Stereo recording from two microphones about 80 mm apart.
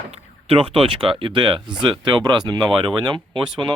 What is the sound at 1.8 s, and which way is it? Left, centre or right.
Speech, right.